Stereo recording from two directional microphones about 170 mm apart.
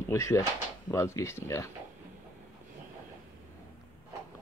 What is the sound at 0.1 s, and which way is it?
Speech, 15° left (ahead or behind).